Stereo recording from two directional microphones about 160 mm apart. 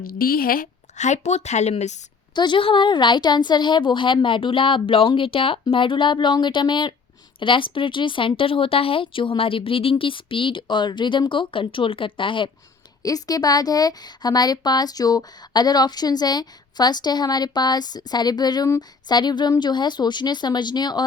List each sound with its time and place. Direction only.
0.0 s a woman's voice: 65° left (ahead or behind); by 2.0 s 45° left (ahead or behind)
2.3 s a woman's voice: 30° left (ahead or behind)